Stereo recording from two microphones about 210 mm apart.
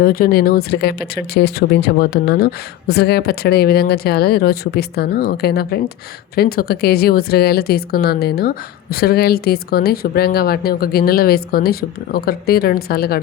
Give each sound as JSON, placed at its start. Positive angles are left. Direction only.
{"t": 0.0, "sound": "speech", "side_deg": 45}